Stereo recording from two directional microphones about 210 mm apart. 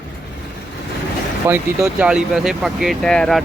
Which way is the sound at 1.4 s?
10° right (ahead or behind).